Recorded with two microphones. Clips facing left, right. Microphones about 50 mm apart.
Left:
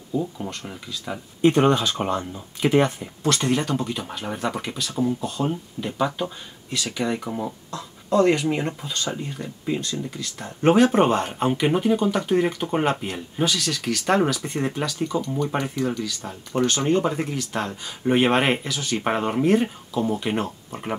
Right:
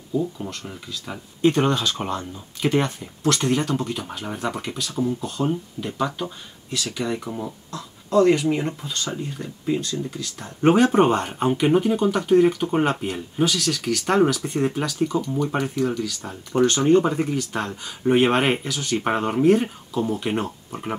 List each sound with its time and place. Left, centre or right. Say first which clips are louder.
0.4 s speech: even; centre
1.4 s speech: left 2 dB; centre
3.3 s speech: even; centre
3.6 s speech: right 1 dB; centre
10.6 s speech: right 1 dB; centre
15.0 s speech: right 3 dB; centre